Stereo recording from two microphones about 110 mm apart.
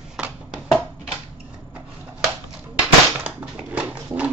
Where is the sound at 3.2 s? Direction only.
10° right (ahead or behind).